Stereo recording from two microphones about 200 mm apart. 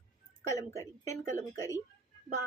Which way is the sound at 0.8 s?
15° left (ahead or behind).